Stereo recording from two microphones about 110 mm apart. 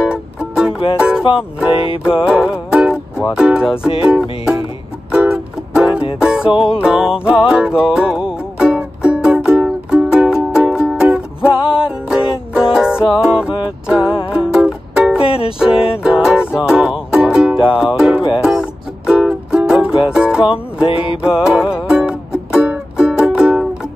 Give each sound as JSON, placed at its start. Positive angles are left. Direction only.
{"t": 0.0, "sound": "music", "side_deg": -5}
{"t": 2.2, "sound": "music", "side_deg": -10}
{"t": 6.5, "sound": "music", "side_deg": 55}
{"t": 6.8, "sound": "music", "side_deg": -5}
{"t": 15.2, "sound": "music", "side_deg": 55}
{"t": 15.6, "sound": "music", "side_deg": -5}
{"t": 20.4, "sound": "music", "side_deg": 55}
{"t": 21.5, "sound": "music", "side_deg": -5}